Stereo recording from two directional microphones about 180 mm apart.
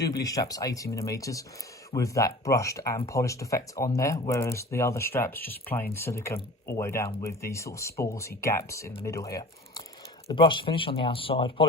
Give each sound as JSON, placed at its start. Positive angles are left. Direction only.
{"t": 0.1, "sound": "speech", "side_deg": 20}